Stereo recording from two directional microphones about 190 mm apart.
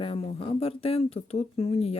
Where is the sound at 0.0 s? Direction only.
30° left (ahead or behind).